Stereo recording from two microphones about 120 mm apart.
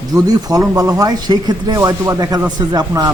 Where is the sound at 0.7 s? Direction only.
30° right (ahead or behind).